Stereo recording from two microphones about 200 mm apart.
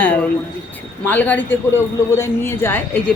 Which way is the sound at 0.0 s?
5° left (ahead or behind).